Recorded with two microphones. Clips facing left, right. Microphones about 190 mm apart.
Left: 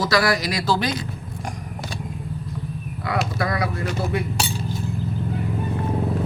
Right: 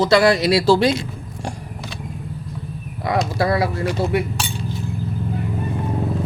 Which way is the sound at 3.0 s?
20° right (ahead or behind).